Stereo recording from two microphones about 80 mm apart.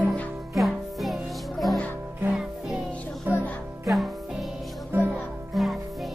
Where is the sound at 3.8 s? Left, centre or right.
Centre.